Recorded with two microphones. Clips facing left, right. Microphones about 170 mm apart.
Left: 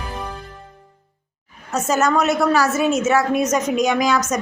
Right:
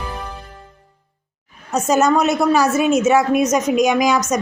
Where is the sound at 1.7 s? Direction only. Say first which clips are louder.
Right 3 dB; 15° right (ahead or behind).